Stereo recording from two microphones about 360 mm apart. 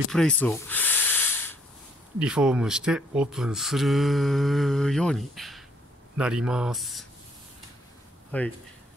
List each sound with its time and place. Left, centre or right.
0.1 s a sound: centre
2.1 s speech: centre
8.3 s speech: centre